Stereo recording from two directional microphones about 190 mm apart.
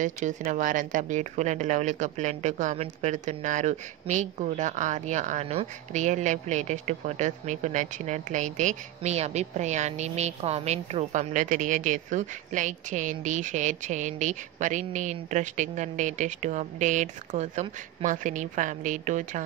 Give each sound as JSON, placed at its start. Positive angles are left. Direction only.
{"t": 0.0, "sound": "speech", "side_deg": -40}